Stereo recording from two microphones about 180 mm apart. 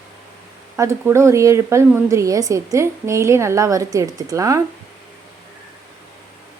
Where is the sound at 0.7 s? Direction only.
15° right (ahead or behind).